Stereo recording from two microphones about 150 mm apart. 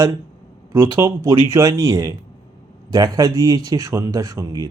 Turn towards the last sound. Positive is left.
turn(degrees=-20)  # may be behind; listen again after turning